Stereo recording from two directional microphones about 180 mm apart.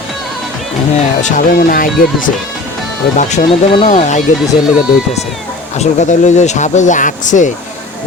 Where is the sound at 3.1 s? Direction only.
40° left (ahead or behind).